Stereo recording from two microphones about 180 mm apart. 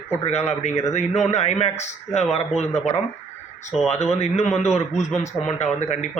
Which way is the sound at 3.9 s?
35° left (ahead or behind).